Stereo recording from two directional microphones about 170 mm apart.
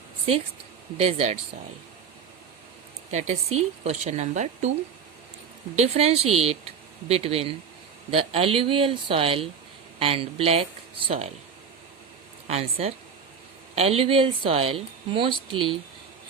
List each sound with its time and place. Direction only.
0.9 s speech: 40° right (ahead or behind)
3.1 s speech: 40° right (ahead or behind)
5.7 s speech: 40° right (ahead or behind)
12.5 s speech: 35° right (ahead or behind)